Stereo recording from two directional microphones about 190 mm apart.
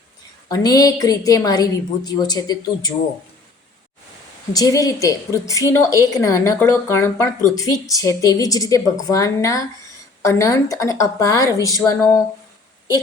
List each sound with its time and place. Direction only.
0.4 s a woman's voice: 20° left (ahead or behind)
4.5 s a woman's voice: 20° left (ahead or behind)